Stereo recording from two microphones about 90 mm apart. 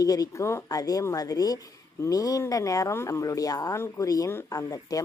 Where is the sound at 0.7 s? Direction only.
45° left (ahead or behind).